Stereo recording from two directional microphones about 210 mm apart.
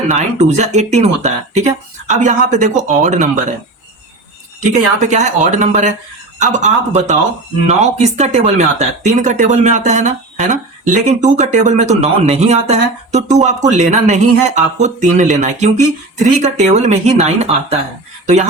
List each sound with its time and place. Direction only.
0.1 s speech: 30° right (ahead or behind)
4.6 s speech: 35° right (ahead or behind)